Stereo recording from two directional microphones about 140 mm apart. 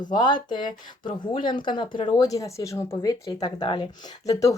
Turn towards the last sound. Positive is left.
turn(degrees=25)  # may be behind; listen again after turning